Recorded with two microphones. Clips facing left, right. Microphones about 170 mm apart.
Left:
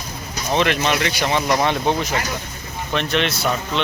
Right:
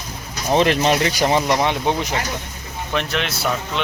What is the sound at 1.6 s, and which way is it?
Speech, 15° right (ahead or behind).